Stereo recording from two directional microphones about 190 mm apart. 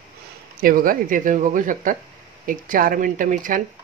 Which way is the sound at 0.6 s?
50° right (ahead or behind).